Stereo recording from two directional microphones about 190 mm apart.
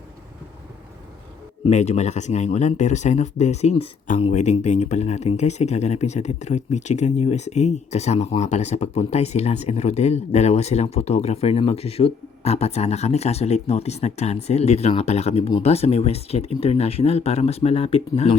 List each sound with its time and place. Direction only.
1.6 s speech: 35° left (ahead or behind)